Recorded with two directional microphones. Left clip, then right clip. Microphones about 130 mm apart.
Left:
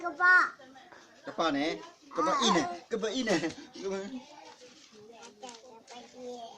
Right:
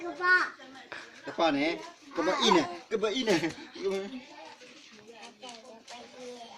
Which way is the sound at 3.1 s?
30° left (ahead or behind).